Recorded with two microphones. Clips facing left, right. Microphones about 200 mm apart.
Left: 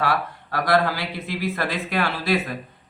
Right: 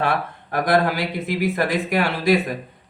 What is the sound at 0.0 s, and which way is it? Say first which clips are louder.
Speech: right 1 dB; 25° right (ahead or behind).